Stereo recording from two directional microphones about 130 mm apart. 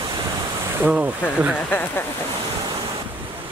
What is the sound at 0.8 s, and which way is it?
Speech, 10° right (ahead or behind).